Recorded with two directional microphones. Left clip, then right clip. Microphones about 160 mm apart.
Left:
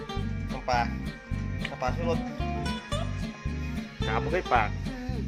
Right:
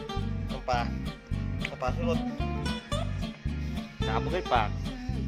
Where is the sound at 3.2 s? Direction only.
90° right.